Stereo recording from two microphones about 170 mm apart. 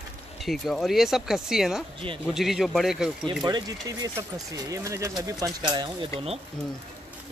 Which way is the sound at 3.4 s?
25° right (ahead or behind).